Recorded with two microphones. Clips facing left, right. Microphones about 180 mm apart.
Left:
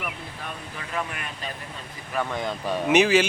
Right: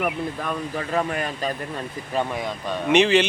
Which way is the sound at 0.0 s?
45° right (ahead or behind).